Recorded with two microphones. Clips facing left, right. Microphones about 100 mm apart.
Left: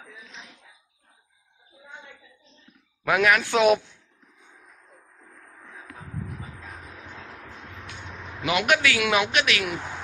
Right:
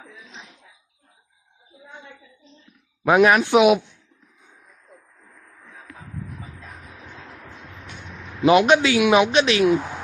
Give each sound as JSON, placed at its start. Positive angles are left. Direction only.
{"t": 3.1, "sound": "a man's voice", "side_deg": -25}
{"t": 8.4, "sound": "a man's voice", "side_deg": -30}